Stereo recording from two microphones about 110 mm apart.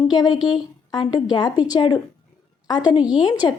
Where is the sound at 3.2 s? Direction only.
40° left (ahead or behind).